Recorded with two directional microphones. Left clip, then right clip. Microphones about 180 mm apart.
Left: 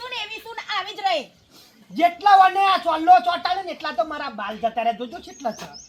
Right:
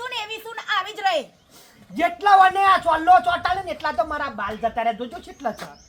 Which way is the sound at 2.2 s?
15° right (ahead or behind).